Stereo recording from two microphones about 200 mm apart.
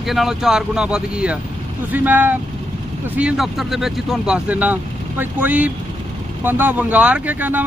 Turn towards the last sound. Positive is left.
turn(degrees=-10)  # may be behind; listen again after turning